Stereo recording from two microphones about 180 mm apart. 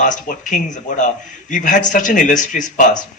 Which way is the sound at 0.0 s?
45° left (ahead or behind).